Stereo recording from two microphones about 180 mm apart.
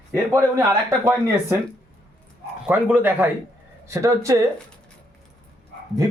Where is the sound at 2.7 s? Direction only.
10° right (ahead or behind).